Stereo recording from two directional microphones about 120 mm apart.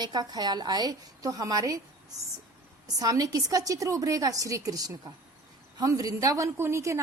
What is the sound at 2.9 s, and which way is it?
A woman's voice, 30° right (ahead or behind).